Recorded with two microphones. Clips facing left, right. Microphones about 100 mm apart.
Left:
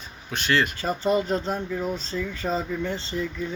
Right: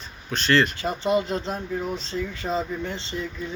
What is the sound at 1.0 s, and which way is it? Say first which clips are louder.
Speech: even; 40° left (ahead or behind).